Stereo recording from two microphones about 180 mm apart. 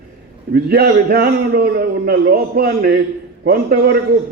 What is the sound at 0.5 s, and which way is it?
A man's voice, 60° right (ahead or behind).